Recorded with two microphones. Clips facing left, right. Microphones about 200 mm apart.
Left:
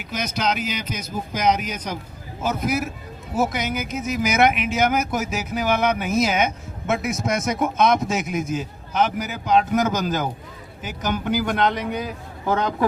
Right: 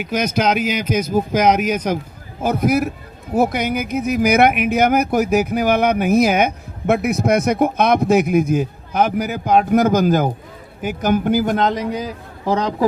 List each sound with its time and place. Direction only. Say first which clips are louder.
0.2 s a man's voice: right 6 dB; 55° right (ahead or behind); by 12.7 s 35° right (ahead or behind)